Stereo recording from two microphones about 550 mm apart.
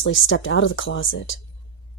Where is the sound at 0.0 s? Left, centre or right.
Left.